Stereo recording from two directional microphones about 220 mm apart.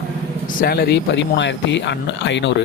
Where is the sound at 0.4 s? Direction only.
45° left (ahead or behind).